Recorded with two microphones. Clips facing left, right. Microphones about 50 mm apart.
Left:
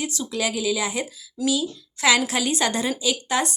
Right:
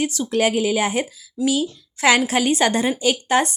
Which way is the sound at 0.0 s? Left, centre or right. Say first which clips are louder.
Right 7 dB; right.